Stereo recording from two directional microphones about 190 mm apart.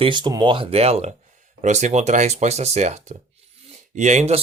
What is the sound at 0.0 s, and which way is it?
Speech, 25° right (ahead or behind).